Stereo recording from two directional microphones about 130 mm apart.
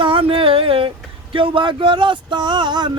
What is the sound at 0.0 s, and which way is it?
Speech, 45° right (ahead or behind).